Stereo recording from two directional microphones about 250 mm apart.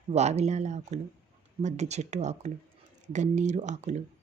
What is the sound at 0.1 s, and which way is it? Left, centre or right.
Speech, right.